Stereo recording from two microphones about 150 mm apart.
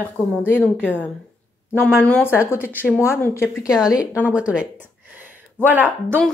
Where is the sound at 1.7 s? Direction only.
10° left (ahead or behind).